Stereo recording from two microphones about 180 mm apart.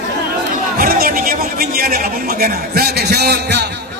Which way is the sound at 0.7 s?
55° right (ahead or behind).